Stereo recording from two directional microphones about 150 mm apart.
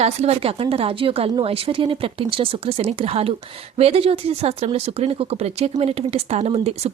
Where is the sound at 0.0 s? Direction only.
45° right (ahead or behind).